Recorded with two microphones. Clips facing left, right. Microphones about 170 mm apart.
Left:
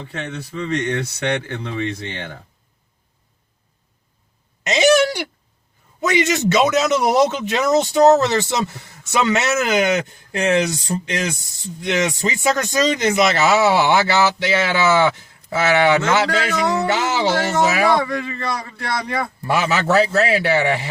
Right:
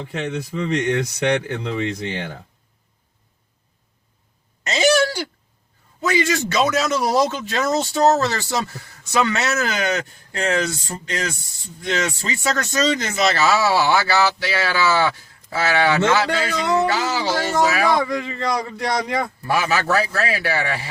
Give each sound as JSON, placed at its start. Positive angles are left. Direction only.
{"t": 0.0, "sound": "speech", "side_deg": -15}
{"t": 4.7, "sound": "a sound", "side_deg": 20}
{"t": 6.0, "sound": "speech", "side_deg": 20}
{"t": 17.9, "sound": "speech", "side_deg": -20}
{"t": 19.4, "sound": "speech", "side_deg": 25}